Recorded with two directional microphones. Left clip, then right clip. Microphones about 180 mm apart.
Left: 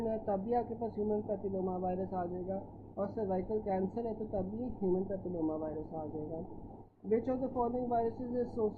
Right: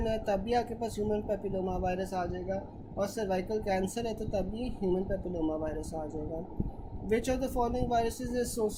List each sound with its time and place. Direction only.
0.0 s a woman's voice: 20° right (ahead or behind)
7.4 s a woman's voice: 20° right (ahead or behind)